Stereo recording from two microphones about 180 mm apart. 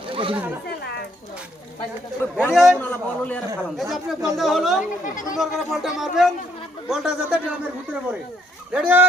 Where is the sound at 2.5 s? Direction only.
5° right (ahead or behind).